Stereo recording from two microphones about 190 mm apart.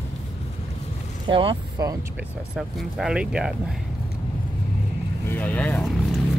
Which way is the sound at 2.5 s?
Centre (ahead or behind).